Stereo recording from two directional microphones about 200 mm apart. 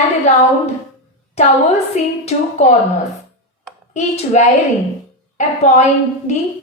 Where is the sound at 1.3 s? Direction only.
30° left (ahead or behind).